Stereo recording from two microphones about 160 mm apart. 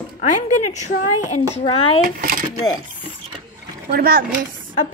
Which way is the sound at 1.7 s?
35° left (ahead or behind).